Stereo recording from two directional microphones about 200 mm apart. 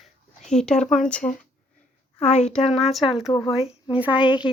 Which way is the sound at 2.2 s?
35° left (ahead or behind).